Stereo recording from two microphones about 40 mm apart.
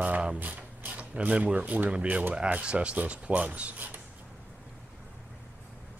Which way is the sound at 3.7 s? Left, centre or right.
Right.